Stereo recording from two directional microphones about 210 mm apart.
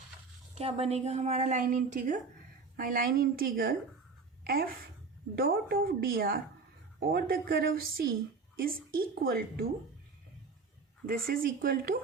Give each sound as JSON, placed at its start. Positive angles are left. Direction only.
{"t": 0.5, "sound": "a woman's voice", "side_deg": -30}
{"t": 11.0, "sound": "a woman's voice", "side_deg": -45}